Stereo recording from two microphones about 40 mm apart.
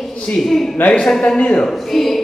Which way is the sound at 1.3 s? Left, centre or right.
Left.